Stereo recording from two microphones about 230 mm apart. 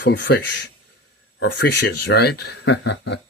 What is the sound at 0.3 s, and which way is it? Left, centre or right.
Speech, left.